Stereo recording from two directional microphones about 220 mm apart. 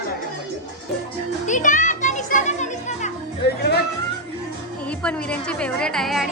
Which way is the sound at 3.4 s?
50° left (ahead or behind).